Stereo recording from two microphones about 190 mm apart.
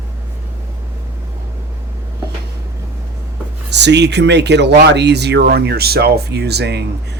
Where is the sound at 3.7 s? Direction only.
65° right (ahead or behind).